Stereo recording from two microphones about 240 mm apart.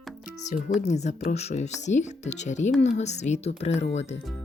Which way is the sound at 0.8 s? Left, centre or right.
Left.